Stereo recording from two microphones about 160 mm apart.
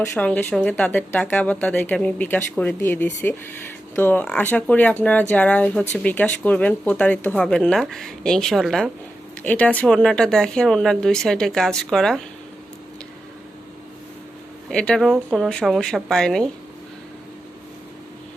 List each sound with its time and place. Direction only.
0.0 s speech: 10° left (ahead or behind)
14.7 s speech: 5° left (ahead or behind)